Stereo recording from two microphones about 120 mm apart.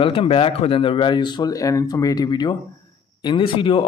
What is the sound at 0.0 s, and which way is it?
Speech, 45° left (ahead or behind).